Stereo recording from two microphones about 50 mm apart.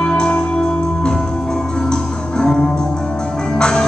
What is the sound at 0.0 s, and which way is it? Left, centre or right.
Music, centre.